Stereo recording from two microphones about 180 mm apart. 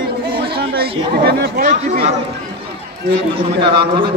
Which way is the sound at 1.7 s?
40° right (ahead or behind).